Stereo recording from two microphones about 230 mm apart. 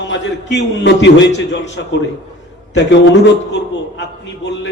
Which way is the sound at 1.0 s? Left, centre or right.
Left.